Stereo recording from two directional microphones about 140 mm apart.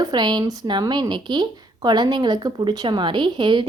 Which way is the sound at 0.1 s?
30° right (ahead or behind).